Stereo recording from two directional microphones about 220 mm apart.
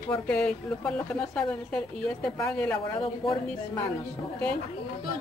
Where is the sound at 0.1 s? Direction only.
5° left (ahead or behind).